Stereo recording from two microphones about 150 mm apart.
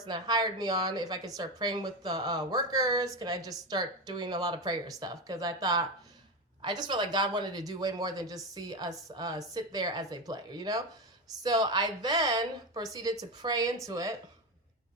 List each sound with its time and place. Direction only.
0.1 s speech: 30° right (ahead or behind)